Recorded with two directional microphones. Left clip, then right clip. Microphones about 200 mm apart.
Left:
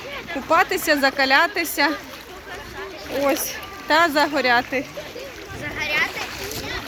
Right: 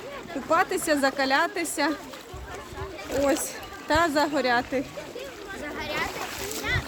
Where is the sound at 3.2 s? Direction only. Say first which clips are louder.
Left 5 dB; 5° right (ahead or behind).